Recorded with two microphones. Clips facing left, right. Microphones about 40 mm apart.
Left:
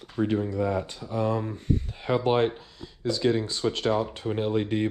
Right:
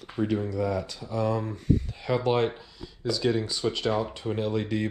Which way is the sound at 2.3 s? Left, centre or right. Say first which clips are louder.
Left 2 dB; left.